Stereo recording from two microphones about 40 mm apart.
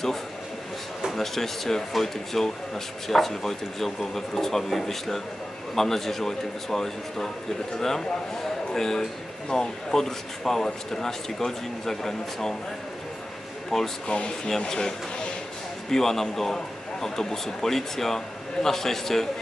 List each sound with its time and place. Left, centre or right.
1.1 s speech: centre
13.7 s speech: centre
14.1 s speech: left
14.7 s speech: centre